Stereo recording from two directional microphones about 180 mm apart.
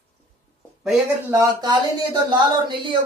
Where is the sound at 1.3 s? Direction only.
20° right (ahead or behind).